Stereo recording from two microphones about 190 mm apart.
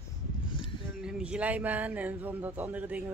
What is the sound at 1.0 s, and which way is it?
Speech, 5° right (ahead or behind).